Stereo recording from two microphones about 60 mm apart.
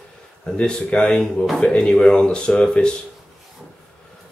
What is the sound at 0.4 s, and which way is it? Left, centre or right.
Speech, centre.